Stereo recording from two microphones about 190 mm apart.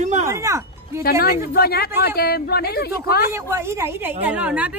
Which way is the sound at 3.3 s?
15° right (ahead or behind).